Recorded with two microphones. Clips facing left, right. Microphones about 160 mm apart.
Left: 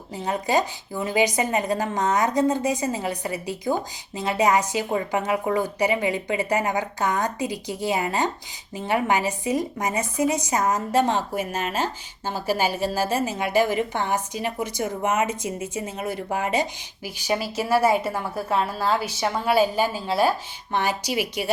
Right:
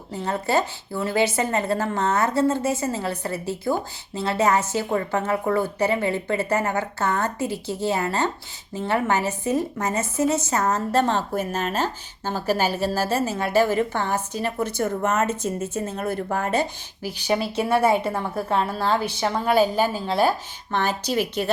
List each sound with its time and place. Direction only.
0.1 s a woman's voice: 15° left (ahead or behind)